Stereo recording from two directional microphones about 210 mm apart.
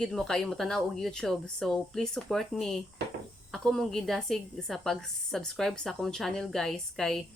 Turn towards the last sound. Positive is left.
turn(degrees=0)  # may be behind; listen again after turning